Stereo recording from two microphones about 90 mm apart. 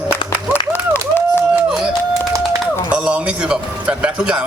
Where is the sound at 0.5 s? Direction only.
25° left (ahead or behind).